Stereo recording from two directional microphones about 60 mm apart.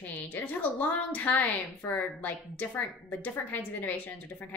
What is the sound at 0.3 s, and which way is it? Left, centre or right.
Speech, left.